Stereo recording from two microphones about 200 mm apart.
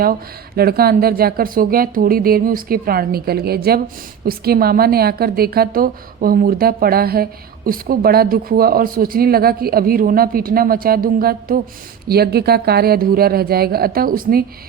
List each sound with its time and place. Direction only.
0.0 s a woman's voice: 50° right (ahead or behind)